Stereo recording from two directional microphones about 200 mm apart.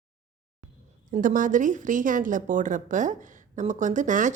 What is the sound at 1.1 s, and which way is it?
A woman's voice, 40° right (ahead or behind).